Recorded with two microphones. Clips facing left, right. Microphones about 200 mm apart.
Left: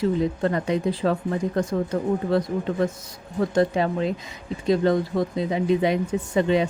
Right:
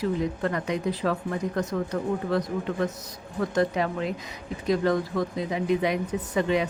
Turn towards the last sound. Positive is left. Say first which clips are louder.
# left 4 dB
turn(degrees=25)  # may be behind; listen again after turning